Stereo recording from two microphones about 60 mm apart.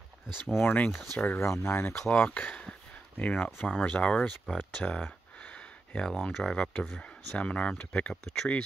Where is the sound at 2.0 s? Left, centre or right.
Left.